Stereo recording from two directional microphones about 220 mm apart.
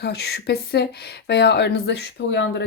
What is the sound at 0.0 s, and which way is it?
Speech, 50° left (ahead or behind).